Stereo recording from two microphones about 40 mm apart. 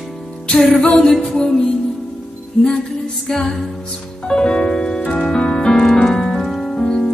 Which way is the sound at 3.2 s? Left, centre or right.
Centre.